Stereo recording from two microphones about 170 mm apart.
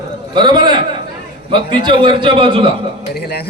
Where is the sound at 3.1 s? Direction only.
65° left (ahead or behind).